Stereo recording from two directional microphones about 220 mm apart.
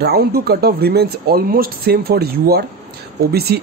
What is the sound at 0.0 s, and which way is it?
Speech, 45° right (ahead or behind).